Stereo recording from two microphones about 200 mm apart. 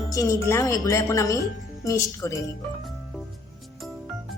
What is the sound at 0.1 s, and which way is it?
Speech, 15° left (ahead or behind).